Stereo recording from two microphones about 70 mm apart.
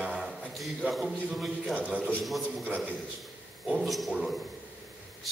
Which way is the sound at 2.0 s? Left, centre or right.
Left.